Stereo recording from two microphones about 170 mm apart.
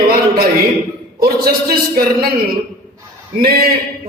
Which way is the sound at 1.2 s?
60° right (ahead or behind).